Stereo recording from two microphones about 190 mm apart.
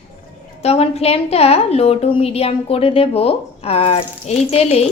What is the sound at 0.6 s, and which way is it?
A woman's voice, 35° left (ahead or behind).